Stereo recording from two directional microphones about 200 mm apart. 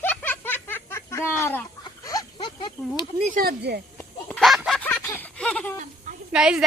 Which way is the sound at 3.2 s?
40° right (ahead or behind).